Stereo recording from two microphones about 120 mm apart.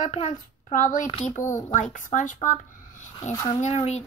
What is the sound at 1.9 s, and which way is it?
Speech, 90° left.